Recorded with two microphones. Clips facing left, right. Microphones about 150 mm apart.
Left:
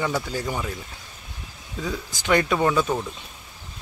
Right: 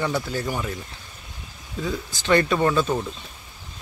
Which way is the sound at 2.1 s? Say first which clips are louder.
Right 1 dB; 10° left (ahead or behind).